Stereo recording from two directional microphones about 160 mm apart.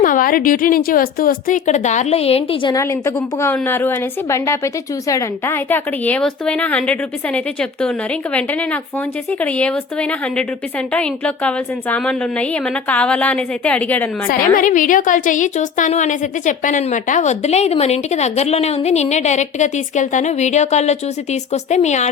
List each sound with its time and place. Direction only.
0.0 s a woman's voice: 60° left (ahead or behind); by 2.7 s 35° left (ahead or behind)
3.4 s a woman's voice: 15° left (ahead or behind)
14.3 s a woman's voice: 55° left (ahead or behind)